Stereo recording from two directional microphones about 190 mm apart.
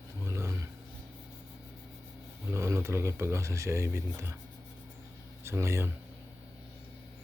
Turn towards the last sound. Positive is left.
turn(degrees=-15)  # may be behind; listen again after turning